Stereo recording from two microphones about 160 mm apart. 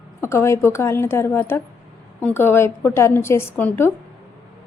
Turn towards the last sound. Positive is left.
turn(degrees=10)  # may be behind; listen again after turning